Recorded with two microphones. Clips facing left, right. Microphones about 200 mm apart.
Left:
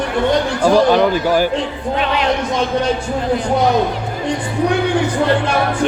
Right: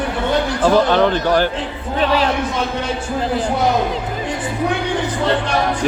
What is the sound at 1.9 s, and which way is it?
Speech, 35° right (ahead or behind).